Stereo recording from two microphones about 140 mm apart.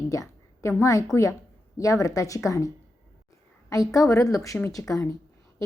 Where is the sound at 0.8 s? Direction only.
25° left (ahead or behind).